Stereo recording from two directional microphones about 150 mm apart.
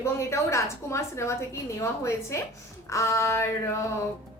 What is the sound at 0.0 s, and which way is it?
A woman's voice, 20° left (ahead or behind).